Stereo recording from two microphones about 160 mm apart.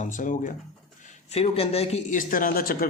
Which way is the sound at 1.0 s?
40° left (ahead or behind).